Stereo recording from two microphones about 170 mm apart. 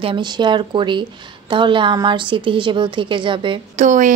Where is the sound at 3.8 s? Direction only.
50° right (ahead or behind).